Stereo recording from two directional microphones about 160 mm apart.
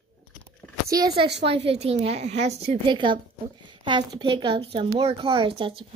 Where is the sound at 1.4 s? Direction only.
40° right (ahead or behind).